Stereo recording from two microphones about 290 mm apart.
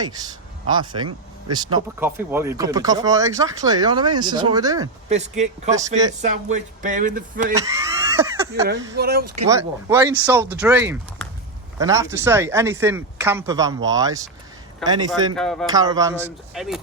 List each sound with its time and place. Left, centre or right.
0.0 s speech: centre
5.0 s speech: right
7.5 s a sound: centre
9.0 s speech: right
9.5 s speech: centre
15.4 s speech: centre
15.7 s speech: centre
16.2 s speech: centre